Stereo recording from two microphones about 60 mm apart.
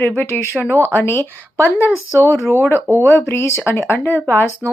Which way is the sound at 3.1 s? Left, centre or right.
Left.